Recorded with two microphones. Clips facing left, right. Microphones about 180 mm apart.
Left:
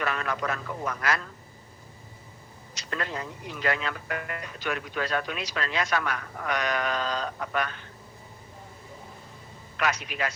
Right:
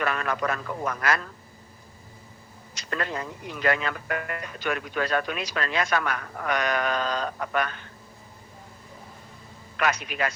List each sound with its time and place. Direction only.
0.0 s speech: 55° right (ahead or behind)
2.7 s speech: 50° right (ahead or behind)
9.7 s speech: 55° right (ahead or behind)